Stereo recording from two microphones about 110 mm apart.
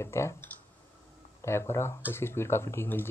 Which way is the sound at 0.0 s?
25° left (ahead or behind).